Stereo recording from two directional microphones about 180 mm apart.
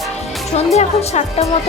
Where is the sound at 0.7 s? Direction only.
35° left (ahead or behind).